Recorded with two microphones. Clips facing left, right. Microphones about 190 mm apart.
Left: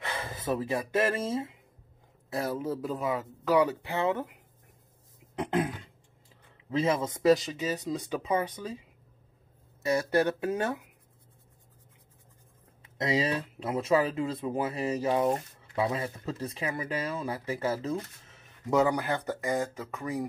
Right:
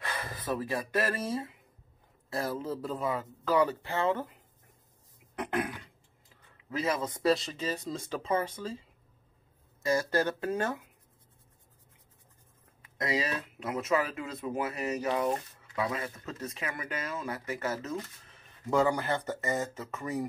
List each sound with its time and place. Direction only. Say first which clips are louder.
0.0 s speech: left 3 dB; 25° left (ahead or behind)
3.1 s speech: left 3 dB; 10° left (ahead or behind)
5.3 s a sound: left 3 dB; 25° left (ahead or behind)
6.7 s speech: left 4 dB; 25° left (ahead or behind)
9.9 s speech: left 4 dB; 15° left (ahead or behind)
12.8 s speech: left 4 dB; 25° left (ahead or behind)
18.9 s speech: left 1 dB; centre (ahead or behind)
19.9 s speech: left 1 dB; 15° left (ahead or behind)